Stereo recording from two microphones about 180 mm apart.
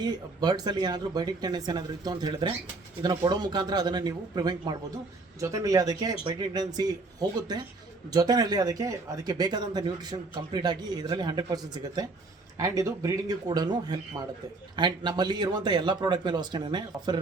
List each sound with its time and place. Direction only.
0.0 s speech: 25° right (ahead or behind)